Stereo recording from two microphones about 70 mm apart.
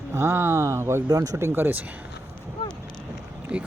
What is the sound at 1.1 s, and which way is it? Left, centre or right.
Speech, right.